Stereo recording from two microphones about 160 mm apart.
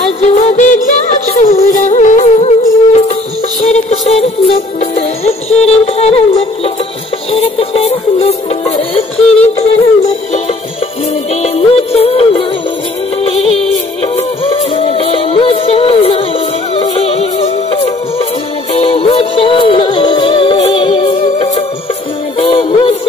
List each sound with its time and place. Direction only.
0.2 s music: 40° left (ahead or behind)
11.4 s music: 40° left (ahead or behind)